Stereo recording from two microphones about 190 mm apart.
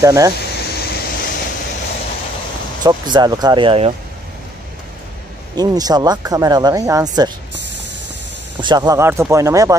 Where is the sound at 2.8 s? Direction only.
20° right (ahead or behind).